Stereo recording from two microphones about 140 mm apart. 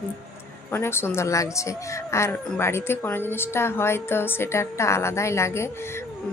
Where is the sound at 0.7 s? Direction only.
15° left (ahead or behind).